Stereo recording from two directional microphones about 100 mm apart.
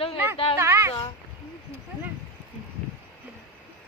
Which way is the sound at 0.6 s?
30° right (ahead or behind).